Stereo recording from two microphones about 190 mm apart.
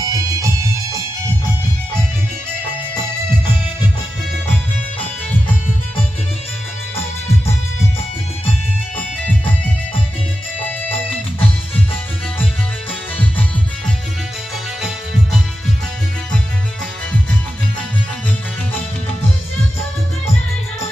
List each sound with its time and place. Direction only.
0.0 s music: 20° right (ahead or behind)